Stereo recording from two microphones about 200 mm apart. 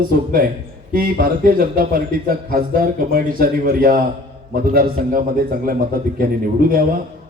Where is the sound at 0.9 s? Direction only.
45° right (ahead or behind).